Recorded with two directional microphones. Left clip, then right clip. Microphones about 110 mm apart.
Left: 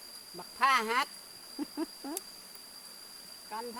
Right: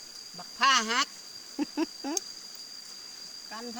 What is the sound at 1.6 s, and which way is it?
Speech, 45° right (ahead or behind).